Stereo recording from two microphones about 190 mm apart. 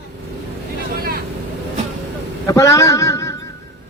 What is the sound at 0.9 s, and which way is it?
Vehicle, 50° right (ahead or behind).